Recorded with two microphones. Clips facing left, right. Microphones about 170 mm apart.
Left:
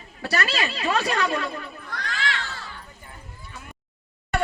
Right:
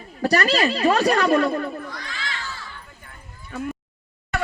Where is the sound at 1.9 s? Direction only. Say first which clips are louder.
Left 4 dB; 75° left (ahead or behind).